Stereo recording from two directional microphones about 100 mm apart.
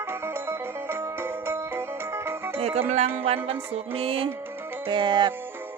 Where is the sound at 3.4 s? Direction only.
70° right (ahead or behind).